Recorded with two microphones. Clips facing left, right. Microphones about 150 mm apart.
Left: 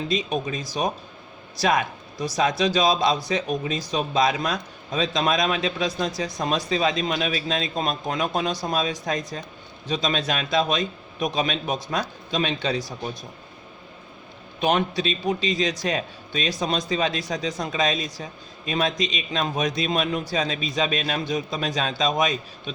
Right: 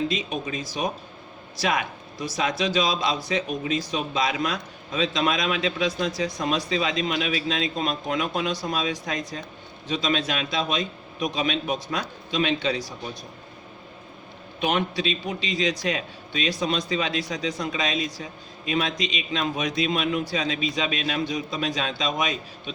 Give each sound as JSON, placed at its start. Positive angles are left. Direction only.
{"t": 0.1, "sound": "a man's voice", "side_deg": 40}
{"t": 2.3, "sound": "a man's voice", "side_deg": 40}
{"t": 14.6, "sound": "a man's voice", "side_deg": 40}